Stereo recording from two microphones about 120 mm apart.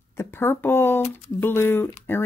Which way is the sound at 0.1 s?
20° left (ahead or behind).